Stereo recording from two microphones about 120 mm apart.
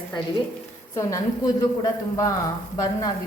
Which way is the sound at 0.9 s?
30° left (ahead or behind).